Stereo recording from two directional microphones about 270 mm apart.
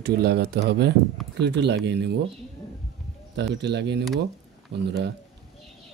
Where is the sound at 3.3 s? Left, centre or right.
Right.